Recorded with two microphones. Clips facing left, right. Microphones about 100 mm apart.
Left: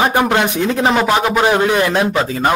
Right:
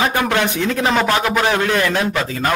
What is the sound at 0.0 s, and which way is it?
Speech, 20° left (ahead or behind).